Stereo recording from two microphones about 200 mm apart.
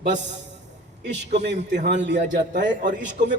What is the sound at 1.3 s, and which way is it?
Speech, 60° right (ahead or behind).